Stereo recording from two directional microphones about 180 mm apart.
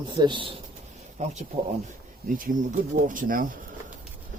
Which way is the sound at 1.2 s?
45° right (ahead or behind).